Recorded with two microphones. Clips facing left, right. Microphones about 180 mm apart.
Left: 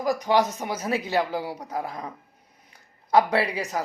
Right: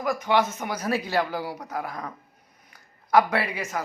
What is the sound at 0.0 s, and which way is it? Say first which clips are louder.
A man's voice: left 1 dB; 35° left (ahead or behind).